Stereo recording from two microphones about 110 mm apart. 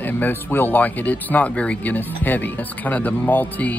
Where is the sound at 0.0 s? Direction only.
20° left (ahead or behind).